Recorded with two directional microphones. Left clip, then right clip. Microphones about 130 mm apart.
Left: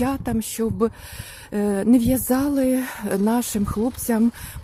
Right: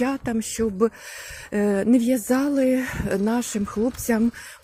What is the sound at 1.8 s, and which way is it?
Speech, 30° left (ahead or behind).